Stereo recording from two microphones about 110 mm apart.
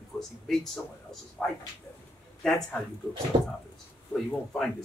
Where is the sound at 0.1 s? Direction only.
Centre (ahead or behind).